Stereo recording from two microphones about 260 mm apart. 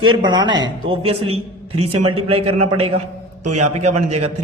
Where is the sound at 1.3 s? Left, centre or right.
Right.